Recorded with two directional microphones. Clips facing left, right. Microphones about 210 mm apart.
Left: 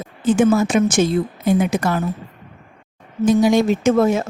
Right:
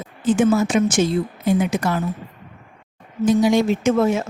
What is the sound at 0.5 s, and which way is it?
A woman's voice, 50° left (ahead or behind).